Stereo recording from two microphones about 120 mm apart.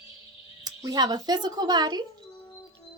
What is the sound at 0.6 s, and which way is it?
A woman's voice, 35° right (ahead or behind).